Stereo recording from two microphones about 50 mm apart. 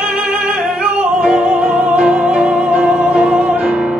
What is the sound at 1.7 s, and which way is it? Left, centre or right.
Music, right.